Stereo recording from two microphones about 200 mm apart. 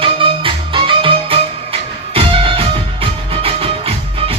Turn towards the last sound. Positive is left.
turn(degrees=-30)  # may be behind; listen again after turning